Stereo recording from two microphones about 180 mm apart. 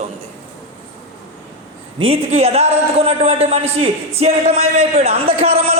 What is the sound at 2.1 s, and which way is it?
A man's voice, 35° right (ahead or behind).